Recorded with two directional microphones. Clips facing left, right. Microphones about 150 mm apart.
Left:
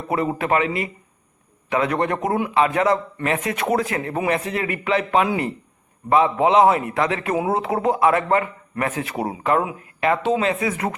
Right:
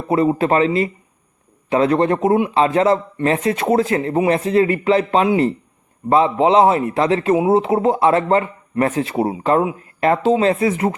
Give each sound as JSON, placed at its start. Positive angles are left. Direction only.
{"t": 0.1, "sound": "a man's voice", "side_deg": -25}